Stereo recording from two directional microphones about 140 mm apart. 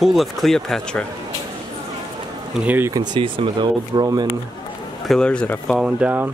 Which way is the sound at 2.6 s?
15° right (ahead or behind).